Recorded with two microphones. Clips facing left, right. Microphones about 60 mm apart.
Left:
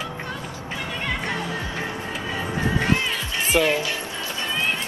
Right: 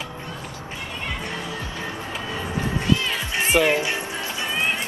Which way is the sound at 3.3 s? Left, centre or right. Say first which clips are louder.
Right 2 dB; right.